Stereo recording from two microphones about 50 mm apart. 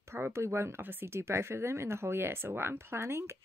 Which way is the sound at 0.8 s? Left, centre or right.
Right.